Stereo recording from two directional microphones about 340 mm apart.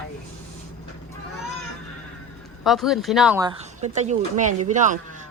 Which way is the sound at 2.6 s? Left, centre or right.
Centre.